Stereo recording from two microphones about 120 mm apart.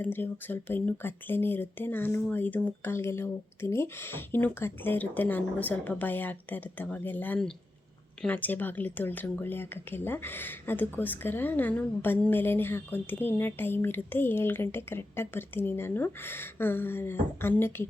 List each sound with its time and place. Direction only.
0.0 s speech: 15° left (ahead or behind)